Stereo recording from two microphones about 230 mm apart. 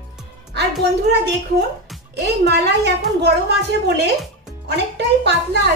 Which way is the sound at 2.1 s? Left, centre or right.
Right.